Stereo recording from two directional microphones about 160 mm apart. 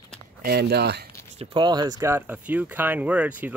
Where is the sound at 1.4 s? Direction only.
30° right (ahead or behind); by 3.5 s 10° right (ahead or behind).